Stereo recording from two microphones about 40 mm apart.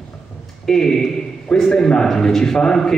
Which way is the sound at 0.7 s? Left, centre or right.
Centre.